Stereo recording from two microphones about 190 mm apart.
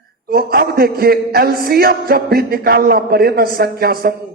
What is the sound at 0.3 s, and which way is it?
A man's voice, 55° right (ahead or behind).